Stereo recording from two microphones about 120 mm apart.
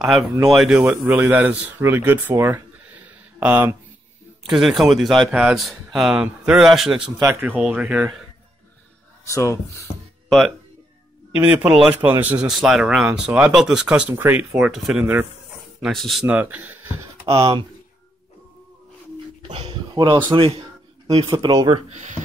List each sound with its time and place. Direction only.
0.0 s a man's voice: centre (ahead or behind)
4.4 s a man's voice: centre (ahead or behind)
7.2 s speech: 20° right (ahead or behind)
9.2 s speech: 25° left (ahead or behind)
11.3 s speech: 15° right (ahead or behind)
12.4 s a man's voice: centre (ahead or behind)
14.1 s speech: 20° right (ahead or behind)
14.5 s a man's voice: 5° right (ahead or behind)
16.3 s speech: 15° right (ahead or behind)
19.4 s speech: 50° right (ahead or behind)
19.9 s speech: 40° right (ahead or behind)
20.3 s a man's voice: 50° right (ahead or behind)
21.4 s speech: 35° right (ahead or behind)
21.9 s speech: 90° right